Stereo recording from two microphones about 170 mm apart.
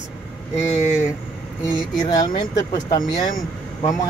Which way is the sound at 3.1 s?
55° left (ahead or behind).